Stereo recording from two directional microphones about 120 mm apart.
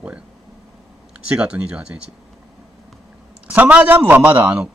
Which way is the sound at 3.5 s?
10° right (ahead or behind).